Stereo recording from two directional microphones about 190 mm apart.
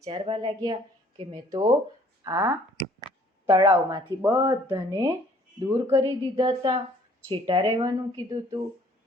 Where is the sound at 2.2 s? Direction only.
15° right (ahead or behind).